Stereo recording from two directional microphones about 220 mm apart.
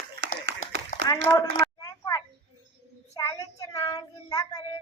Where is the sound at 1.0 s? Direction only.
15° left (ahead or behind).